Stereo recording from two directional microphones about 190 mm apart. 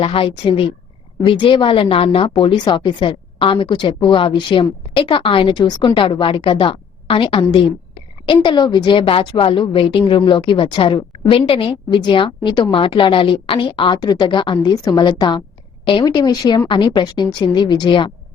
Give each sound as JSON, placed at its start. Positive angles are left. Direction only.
{"t": 0.0, "sound": "a woman's voice", "side_deg": 30}